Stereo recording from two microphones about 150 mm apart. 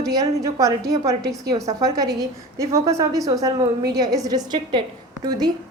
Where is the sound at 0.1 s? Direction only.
25° right (ahead or behind).